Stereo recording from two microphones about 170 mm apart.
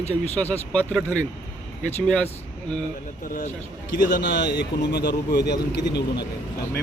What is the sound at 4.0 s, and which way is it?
Speech, 55° left (ahead or behind).